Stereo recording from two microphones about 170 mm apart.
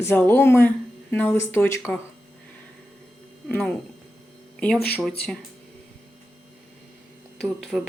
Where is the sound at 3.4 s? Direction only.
10° left (ahead or behind).